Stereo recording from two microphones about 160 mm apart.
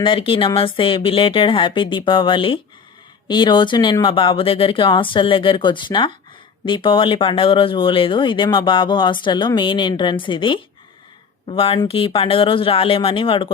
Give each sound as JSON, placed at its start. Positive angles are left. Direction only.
{"t": 0.0, "sound": "speech", "side_deg": 35}